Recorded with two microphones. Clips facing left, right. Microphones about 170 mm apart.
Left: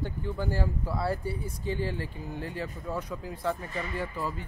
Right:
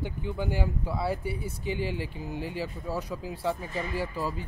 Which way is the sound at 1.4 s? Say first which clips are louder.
Even; 85° right.